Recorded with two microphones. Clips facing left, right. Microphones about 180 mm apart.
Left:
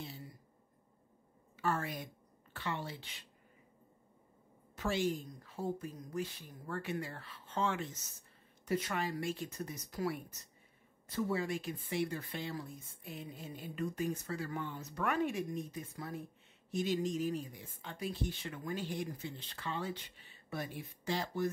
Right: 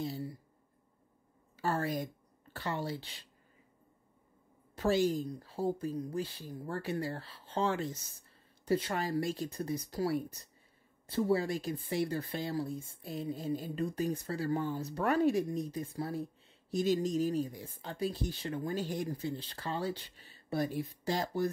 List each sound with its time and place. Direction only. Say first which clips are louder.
0.0 s a sound: right 10 dB; 35° right (ahead or behind)
1.6 s a woman's voice: right 4 dB; 35° right (ahead or behind)
4.7 s speech: right 6 dB; 35° right (ahead or behind)